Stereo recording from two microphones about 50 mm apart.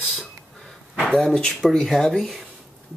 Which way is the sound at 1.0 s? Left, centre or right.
Centre.